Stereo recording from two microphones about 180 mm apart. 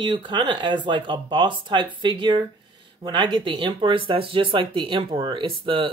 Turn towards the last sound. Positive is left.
turn(degrees=-30)  # may be behind; listen again after turning